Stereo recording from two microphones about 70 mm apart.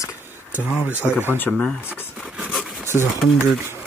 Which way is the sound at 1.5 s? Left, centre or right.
Centre.